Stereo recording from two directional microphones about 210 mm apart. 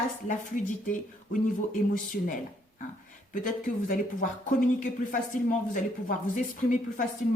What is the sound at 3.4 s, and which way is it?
Speech, 40° left (ahead or behind).